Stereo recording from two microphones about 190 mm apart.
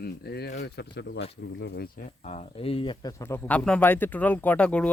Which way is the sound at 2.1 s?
35° left (ahead or behind).